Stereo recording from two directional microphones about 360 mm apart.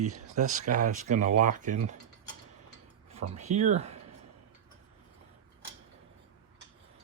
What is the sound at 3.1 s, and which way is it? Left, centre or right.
Speech, centre.